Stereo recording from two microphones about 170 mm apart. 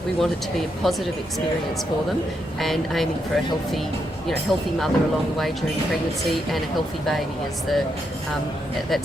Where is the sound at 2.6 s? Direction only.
Centre (ahead or behind).